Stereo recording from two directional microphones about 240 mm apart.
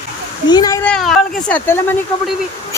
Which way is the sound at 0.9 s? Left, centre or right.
Centre.